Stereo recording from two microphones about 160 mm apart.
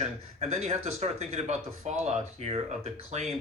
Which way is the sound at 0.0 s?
45° right (ahead or behind).